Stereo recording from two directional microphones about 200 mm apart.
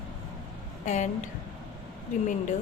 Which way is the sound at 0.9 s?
35° left (ahead or behind).